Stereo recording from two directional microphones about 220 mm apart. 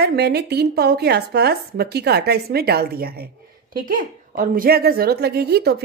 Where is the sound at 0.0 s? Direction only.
45° right (ahead or behind).